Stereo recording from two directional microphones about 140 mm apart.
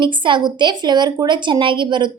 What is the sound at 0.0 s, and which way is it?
A woman's voice, 35° right (ahead or behind).